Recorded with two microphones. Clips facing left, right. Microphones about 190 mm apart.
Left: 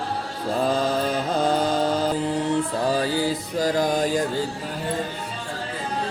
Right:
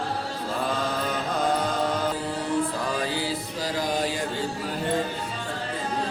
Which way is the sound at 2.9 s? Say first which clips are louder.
Left 5 dB; 40° left (ahead or behind).